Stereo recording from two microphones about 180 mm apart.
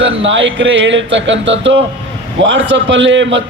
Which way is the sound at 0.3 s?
90° right.